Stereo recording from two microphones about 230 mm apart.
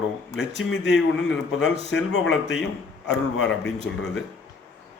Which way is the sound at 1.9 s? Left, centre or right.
Left.